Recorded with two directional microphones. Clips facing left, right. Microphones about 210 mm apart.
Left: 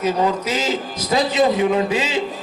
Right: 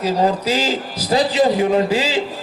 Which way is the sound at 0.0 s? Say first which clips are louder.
Right 1 dB; 35° right (ahead or behind).